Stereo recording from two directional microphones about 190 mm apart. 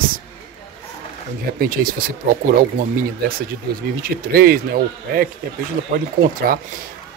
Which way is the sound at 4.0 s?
50° right (ahead or behind).